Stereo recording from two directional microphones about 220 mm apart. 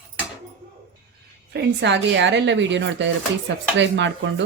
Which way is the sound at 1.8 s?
55° right (ahead or behind).